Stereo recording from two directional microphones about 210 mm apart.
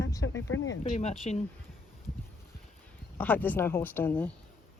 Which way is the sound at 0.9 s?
30° left (ahead or behind).